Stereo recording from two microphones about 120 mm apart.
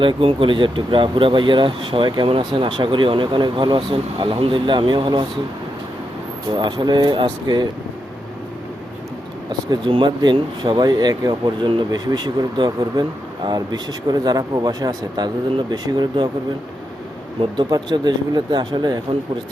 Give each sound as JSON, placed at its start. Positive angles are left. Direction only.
{"t": 0.0, "sound": "speech", "side_deg": -45}
{"t": 6.5, "sound": "speech", "side_deg": -40}
{"t": 9.5, "sound": "speech", "side_deg": -40}
{"t": 17.6, "sound": "speech", "side_deg": -40}